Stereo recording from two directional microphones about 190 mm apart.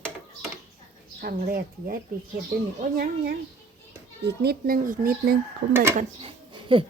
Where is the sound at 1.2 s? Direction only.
50° right (ahead or behind).